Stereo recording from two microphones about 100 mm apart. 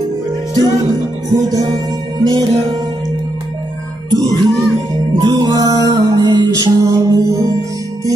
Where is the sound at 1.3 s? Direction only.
35° right (ahead or behind).